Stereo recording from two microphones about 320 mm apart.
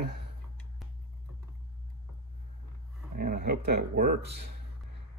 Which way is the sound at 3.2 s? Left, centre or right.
Right.